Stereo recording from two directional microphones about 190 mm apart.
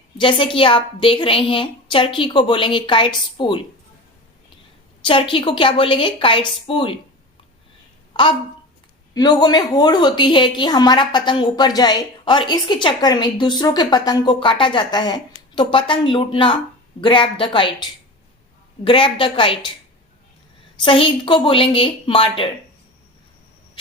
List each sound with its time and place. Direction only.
0.2 s a woman's voice: 25° left (ahead or behind)
5.0 s a woman's voice: 25° left (ahead or behind)
8.1 s a woman's voice: 25° left (ahead or behind)
18.9 s a woman's voice: 25° left (ahead or behind)
20.8 s a woman's voice: 25° left (ahead or behind)